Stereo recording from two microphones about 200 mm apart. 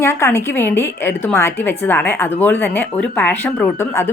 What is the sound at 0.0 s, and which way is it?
A woman's voice, 10° left (ahead or behind).